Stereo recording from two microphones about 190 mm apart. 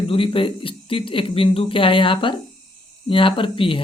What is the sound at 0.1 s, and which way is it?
Speech, 30° left (ahead or behind).